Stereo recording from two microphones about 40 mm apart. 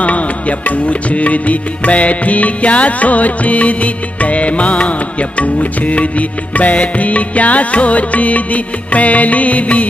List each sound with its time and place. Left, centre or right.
0.0 s music: left